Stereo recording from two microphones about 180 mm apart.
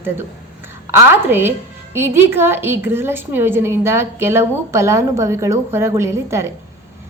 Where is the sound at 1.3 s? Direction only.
10° right (ahead or behind).